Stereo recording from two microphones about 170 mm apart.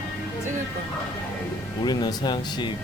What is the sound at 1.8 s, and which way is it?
Speech, 25° left (ahead or behind).